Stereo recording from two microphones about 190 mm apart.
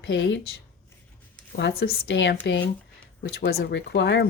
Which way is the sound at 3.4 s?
55° left (ahead or behind).